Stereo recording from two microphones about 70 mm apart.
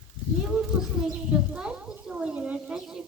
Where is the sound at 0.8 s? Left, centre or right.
Centre.